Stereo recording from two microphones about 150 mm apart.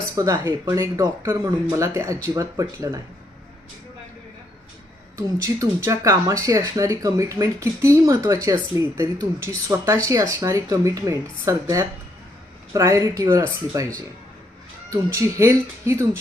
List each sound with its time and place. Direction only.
0.2 s speech: 20° right (ahead or behind)
5.1 s speech: 20° right (ahead or behind)